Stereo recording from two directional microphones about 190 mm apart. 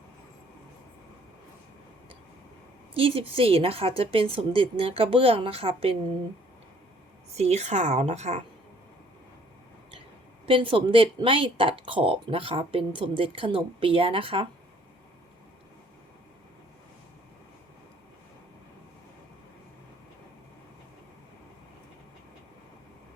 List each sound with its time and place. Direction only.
2.9 s speech: 30° right (ahead or behind)
7.3 s a woman's voice: 35° right (ahead or behind)
10.4 s speech: 25° right (ahead or behind)